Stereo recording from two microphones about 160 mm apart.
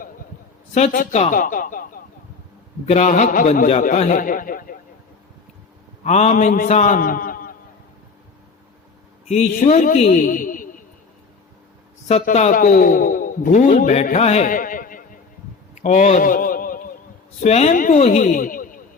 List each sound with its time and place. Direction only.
0.7 s a man's voice: 45° left (ahead or behind)
2.8 s a man's voice: 45° left (ahead or behind)
6.0 s a man's voice: 45° left (ahead or behind)
9.2 s a man's voice: 45° left (ahead or behind)
12.2 s a man's voice: 50° left (ahead or behind)
15.7 s a sound: 50° left (ahead or behind)
17.4 s a man's voice: 45° left (ahead or behind)